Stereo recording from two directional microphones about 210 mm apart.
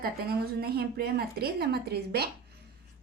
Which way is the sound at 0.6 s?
50° right (ahead or behind).